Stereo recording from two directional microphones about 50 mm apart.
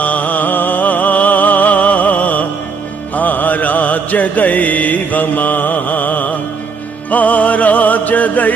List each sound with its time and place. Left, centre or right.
0.0 s music: left
3.2 s mantra: left
7.1 s music: left